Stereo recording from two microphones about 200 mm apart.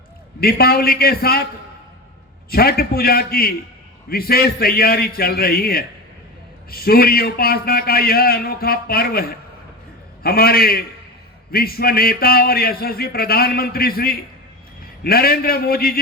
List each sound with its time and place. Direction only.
0.3 s a man's voice: 50° left (ahead or behind)
2.5 s a man's voice: 50° left (ahead or behind)